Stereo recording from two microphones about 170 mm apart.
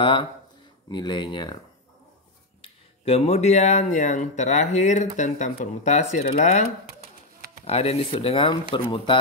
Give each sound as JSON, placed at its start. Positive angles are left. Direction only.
{"t": 0.0, "sound": "speech", "side_deg": 30}
{"t": 3.1, "sound": "speech", "side_deg": 40}
{"t": 7.6, "sound": "speech", "side_deg": 35}